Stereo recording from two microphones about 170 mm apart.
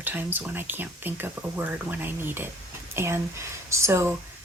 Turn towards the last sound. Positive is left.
turn(degrees=-15)  # may be behind; listen again after turning